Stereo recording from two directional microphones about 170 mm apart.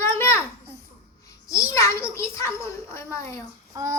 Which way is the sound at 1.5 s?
20° left (ahead or behind).